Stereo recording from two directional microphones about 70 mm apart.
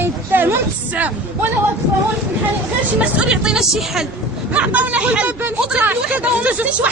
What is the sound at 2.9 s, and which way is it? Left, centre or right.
A woman's voice, centre.